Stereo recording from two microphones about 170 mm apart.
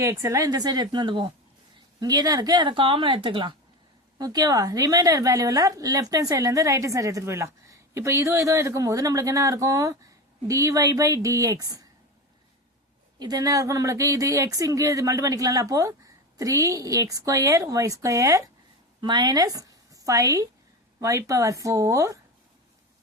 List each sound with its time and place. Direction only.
0.0 s a woman's voice: 15° right (ahead or behind)
13.1 s a woman's voice: 25° right (ahead or behind)